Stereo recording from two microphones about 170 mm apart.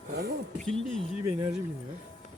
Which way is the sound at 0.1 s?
65° right (ahead or behind).